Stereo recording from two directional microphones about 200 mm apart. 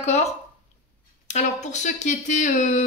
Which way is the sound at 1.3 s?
35° left (ahead or behind).